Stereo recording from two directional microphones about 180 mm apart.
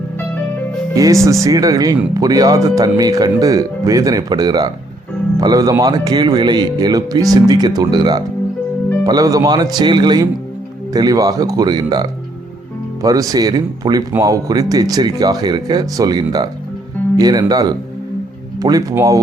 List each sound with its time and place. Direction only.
0.9 s speech: 20° right (ahead or behind)